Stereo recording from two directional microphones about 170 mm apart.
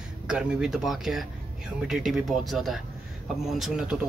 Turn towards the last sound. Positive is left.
turn(degrees=-5)  # may be behind; listen again after turning